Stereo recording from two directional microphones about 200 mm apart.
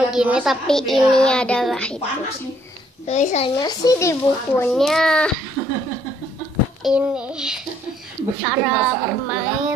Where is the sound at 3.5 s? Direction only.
20° left (ahead or behind).